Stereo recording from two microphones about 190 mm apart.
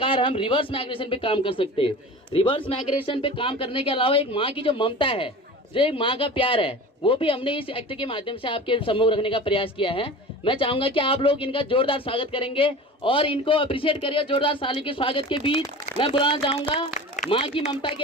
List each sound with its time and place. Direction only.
0.0 s speech: 25° left (ahead or behind)